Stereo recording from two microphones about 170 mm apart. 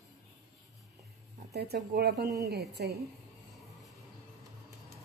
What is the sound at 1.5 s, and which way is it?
Speech, 70° right (ahead or behind).